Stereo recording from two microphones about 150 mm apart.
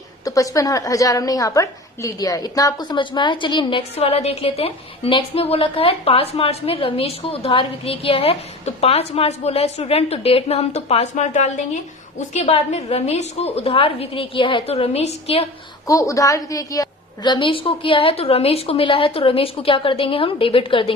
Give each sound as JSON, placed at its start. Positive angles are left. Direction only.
{"t": 0.3, "sound": "a woman's voice", "side_deg": 20}
{"t": 15.9, "sound": "a woman's voice", "side_deg": 20}